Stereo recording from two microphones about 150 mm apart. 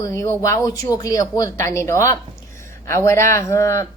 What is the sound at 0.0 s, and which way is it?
A woman's voice, 20° left (ahead or behind).